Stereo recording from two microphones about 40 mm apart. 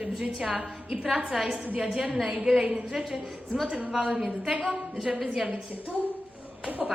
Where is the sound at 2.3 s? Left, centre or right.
Centre.